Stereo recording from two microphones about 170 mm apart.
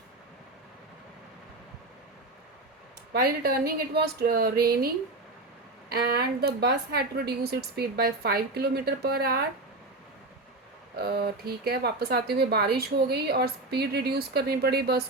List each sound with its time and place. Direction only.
3.1 s speech: 65° right (ahead or behind)
5.9 s speech: 70° right (ahead or behind)
10.9 s speech: 70° right (ahead or behind)